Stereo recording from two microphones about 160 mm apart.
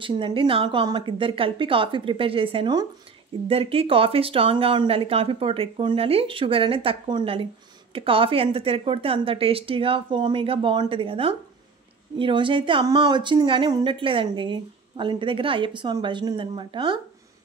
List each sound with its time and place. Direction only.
0.0 s speech: 30° right (ahead or behind)